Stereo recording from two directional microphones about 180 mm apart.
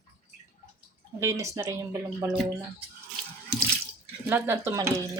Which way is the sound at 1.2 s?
15° right (ahead or behind).